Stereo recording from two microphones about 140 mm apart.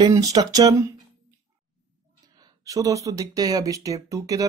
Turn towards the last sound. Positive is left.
turn(degrees=-25)  # may be behind; listen again after turning